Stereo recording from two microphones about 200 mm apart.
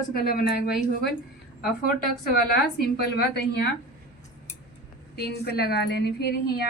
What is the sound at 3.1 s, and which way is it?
Speech, 55° left (ahead or behind).